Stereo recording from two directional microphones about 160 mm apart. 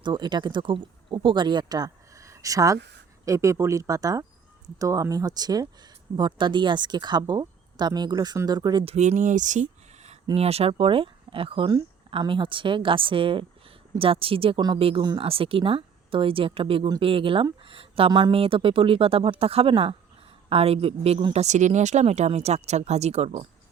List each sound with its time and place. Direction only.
0.0 s speech: 30° right (ahead or behind)
21.4 s speech: 45° right (ahead or behind)